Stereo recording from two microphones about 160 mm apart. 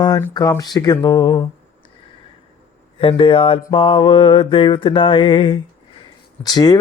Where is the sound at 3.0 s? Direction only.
35° left (ahead or behind).